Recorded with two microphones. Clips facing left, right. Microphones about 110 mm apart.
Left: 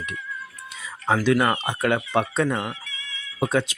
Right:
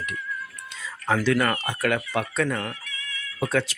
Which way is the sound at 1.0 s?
20° left (ahead or behind).